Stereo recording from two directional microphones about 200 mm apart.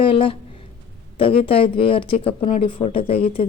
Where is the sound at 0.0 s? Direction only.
25° left (ahead or behind).